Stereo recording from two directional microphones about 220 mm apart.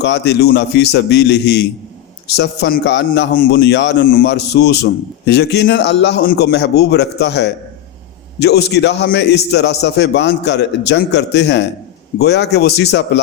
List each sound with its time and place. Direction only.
0.0 s a man's voice: 50° left (ahead or behind)